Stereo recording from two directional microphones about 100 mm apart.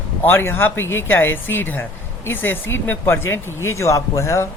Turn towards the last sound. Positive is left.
turn(degrees=30)  # may be behind; listen again after turning